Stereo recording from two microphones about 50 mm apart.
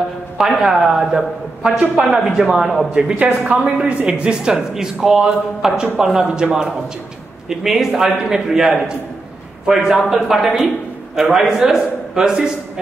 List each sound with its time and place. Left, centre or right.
0.4 s speech: centre
2.9 s speech: centre
3.2 s speech: right; by 12.8 s centre